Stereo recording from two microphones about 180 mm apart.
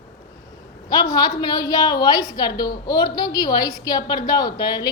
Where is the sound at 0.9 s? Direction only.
20° left (ahead or behind).